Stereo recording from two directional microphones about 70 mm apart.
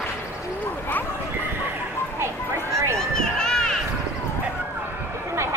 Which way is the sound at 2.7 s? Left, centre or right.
Right.